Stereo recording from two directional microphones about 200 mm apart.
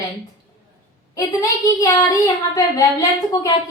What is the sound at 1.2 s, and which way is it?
Speech, 15° left (ahead or behind).